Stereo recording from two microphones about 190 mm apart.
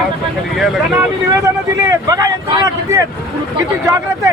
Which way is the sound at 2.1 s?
20° right (ahead or behind).